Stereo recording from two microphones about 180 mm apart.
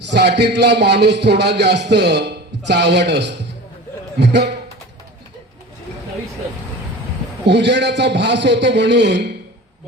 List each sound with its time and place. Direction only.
0.0 s a man's voice: 70° right (ahead or behind)
7.4 s a man's voice: 75° right (ahead or behind)